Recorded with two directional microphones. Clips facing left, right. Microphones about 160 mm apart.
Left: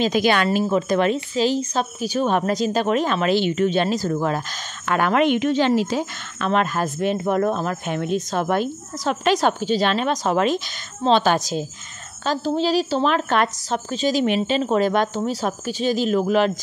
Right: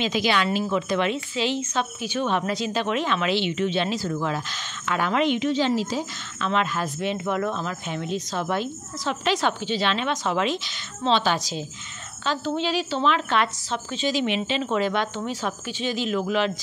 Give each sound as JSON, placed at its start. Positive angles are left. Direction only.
{"t": 0.0, "sound": "speech", "side_deg": 50}
{"t": 4.8, "sound": "speech", "side_deg": 55}
{"t": 12.3, "sound": "a woman's voice", "side_deg": 35}